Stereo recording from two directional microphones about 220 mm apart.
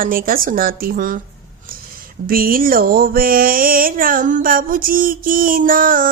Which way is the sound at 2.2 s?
40° right (ahead or behind).